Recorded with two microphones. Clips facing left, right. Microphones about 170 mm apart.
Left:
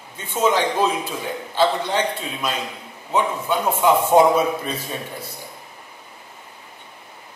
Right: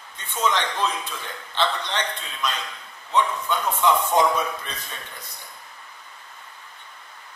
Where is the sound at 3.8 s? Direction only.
25° left (ahead or behind).